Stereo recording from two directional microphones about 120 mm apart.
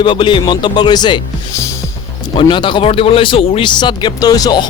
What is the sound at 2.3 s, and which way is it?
Speech, 45° left (ahead or behind).